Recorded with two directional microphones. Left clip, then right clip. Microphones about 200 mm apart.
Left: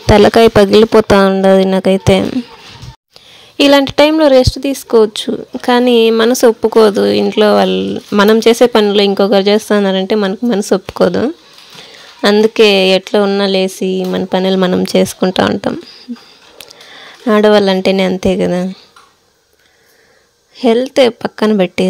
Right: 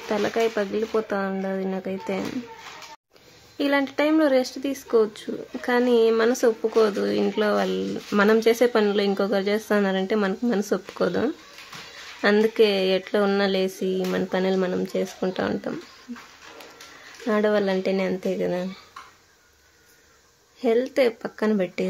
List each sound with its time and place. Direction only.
0.1 s speech: 55° left (ahead or behind)
3.5 s speech: 40° left (ahead or behind)
17.3 s speech: 40° left (ahead or behind)
20.5 s speech: 40° left (ahead or behind)